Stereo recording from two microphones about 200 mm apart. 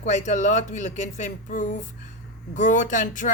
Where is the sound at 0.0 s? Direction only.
35° left (ahead or behind).